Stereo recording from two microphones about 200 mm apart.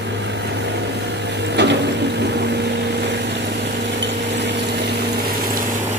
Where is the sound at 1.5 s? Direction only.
60° right (ahead or behind).